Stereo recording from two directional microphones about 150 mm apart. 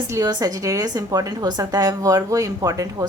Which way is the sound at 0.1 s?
25° right (ahead or behind).